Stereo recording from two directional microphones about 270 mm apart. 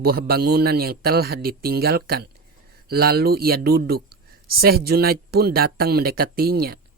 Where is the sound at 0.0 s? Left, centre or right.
Right.